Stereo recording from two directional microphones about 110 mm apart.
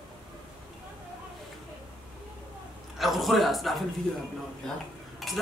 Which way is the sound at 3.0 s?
Centre (ahead or behind).